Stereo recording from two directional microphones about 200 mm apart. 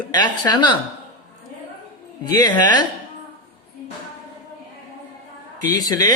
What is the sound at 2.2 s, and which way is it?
Speech, 20° left (ahead or behind).